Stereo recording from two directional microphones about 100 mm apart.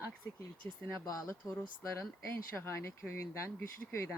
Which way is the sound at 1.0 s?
35° left (ahead or behind).